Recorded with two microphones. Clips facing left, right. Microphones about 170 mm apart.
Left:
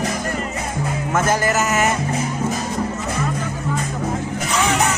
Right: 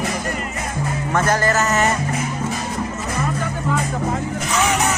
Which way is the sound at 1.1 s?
10° left (ahead or behind).